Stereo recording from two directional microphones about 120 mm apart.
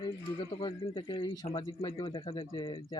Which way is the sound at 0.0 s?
45° left (ahead or behind).